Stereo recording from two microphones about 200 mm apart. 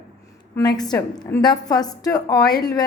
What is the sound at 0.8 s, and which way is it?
A woman's voice, 20° left (ahead or behind).